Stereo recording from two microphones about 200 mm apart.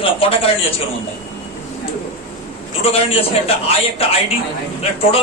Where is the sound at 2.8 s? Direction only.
30° left (ahead or behind).